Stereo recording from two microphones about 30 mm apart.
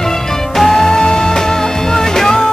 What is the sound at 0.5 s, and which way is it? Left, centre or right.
Music, centre.